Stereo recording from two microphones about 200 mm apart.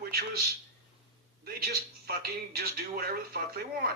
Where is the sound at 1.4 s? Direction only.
50° right (ahead or behind).